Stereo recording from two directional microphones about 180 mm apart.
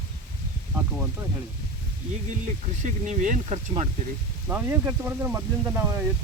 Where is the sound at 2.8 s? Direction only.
45° right (ahead or behind).